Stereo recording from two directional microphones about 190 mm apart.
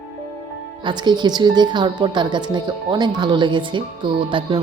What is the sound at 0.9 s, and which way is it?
A woman's voice, 25° right (ahead or behind).